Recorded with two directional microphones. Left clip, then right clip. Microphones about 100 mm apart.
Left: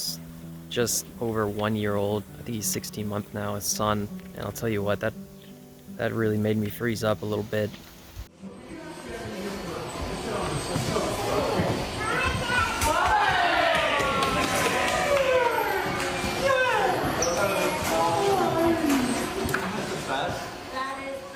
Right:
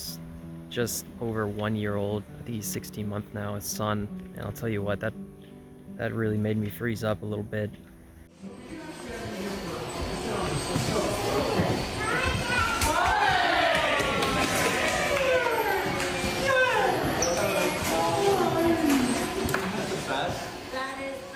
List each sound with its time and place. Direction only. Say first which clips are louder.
0.7 s speech: left 4 dB; 20° left (ahead or behind)
1.5 s speech: left 3 dB; 30° left (ahead or behind)
9.0 s a sound: even; centre (ahead or behind)